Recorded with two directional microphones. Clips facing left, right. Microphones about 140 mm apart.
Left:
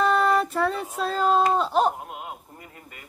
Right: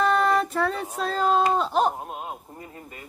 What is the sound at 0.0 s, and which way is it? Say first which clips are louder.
Child singing: even; centre (ahead or behind).